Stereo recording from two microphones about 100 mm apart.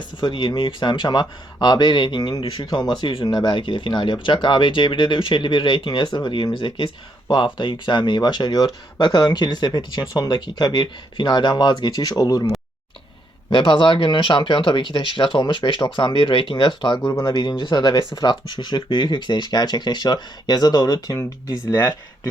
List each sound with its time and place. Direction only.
0.0 s speech: 50° left (ahead or behind)
13.5 s speech: 55° left (ahead or behind); by 22.3 s 35° left (ahead or behind)